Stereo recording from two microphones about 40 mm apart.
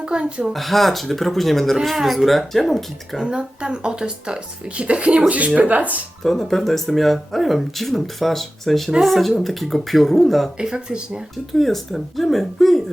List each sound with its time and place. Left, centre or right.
0.0 s speech: right
0.5 s speech: centre
3.2 s speech: right
5.5 s speech: right
6.2 s speech: centre
10.6 s speech: right
11.5 s speech: centre